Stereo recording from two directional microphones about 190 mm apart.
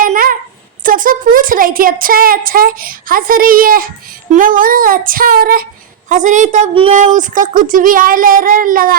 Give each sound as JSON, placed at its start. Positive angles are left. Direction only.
{"t": 0.0, "sound": "a sound", "side_deg": -45}
{"t": 0.9, "sound": "speech", "side_deg": -45}
{"t": 6.1, "sound": "a woman's voice", "side_deg": -40}